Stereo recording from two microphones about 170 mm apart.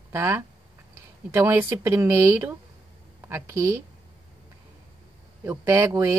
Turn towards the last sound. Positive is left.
turn(degrees=-15)  # may be behind; listen again after turning